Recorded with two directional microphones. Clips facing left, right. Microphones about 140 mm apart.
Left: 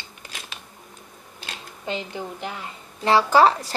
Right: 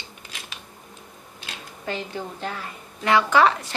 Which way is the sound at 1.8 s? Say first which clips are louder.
Even; 15° left (ahead or behind).